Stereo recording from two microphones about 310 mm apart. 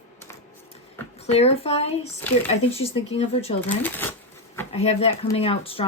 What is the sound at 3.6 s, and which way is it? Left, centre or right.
Speech, centre.